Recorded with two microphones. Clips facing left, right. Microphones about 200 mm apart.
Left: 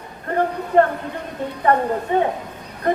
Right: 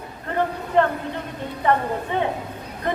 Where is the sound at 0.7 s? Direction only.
45° left (ahead or behind).